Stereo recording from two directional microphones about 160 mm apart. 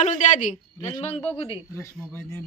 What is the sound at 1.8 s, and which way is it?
Speech, 15° left (ahead or behind).